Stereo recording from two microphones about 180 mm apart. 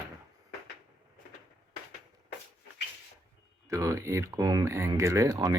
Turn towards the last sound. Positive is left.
turn(degrees=-20)  # may be behind; listen again after turning